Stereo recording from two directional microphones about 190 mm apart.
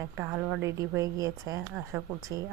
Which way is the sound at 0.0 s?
15° right (ahead or behind).